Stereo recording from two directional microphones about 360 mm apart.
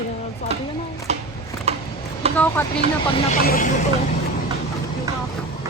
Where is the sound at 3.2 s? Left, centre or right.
Left.